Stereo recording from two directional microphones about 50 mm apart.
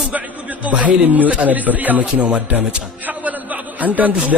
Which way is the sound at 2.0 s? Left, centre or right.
Right.